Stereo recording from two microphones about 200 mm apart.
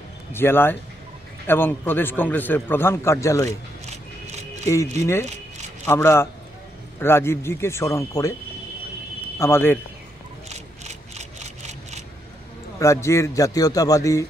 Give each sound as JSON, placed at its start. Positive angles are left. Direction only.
{"t": 0.3, "sound": "a man's voice", "side_deg": 10}
{"t": 3.8, "sound": "a sound", "side_deg": -35}
{"t": 4.6, "sound": "a man's voice", "side_deg": 15}
{"t": 9.4, "sound": "a man's voice", "side_deg": 10}
{"t": 10.5, "sound": "a sound", "side_deg": -35}
{"t": 12.7, "sound": "a man's voice", "side_deg": 15}